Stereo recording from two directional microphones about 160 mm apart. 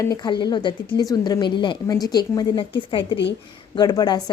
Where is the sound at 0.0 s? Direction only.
25° left (ahead or behind).